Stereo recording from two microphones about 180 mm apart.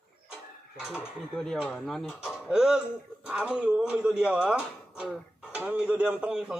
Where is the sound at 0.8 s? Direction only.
Centre (ahead or behind).